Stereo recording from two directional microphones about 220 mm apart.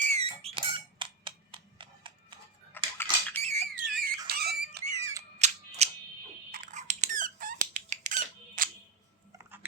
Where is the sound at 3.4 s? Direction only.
30° right (ahead or behind).